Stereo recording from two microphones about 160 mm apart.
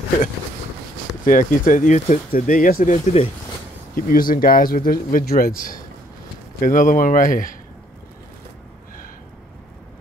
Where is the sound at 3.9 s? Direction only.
60° left (ahead or behind).